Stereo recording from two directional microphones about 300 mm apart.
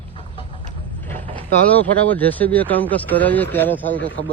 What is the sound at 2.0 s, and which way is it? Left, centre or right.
Speech, centre.